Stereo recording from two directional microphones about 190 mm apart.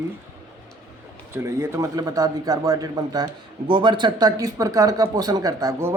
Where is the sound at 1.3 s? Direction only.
15° right (ahead or behind).